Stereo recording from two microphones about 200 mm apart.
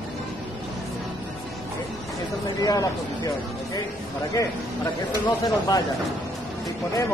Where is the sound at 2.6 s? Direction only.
20° left (ahead or behind).